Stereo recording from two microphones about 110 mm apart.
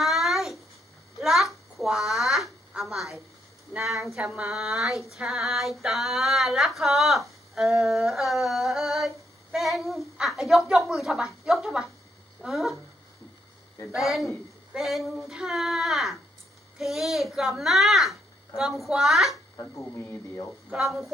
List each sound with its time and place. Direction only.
0.0 s a sound: centre (ahead or behind)
3.8 s speech: centre (ahead or behind)
5.1 s a sound: centre (ahead or behind)
12.4 s speech: centre (ahead or behind)
13.9 s speech: centre (ahead or behind)
19.6 s speech: 25° left (ahead or behind)
20.7 s speech: centre (ahead or behind)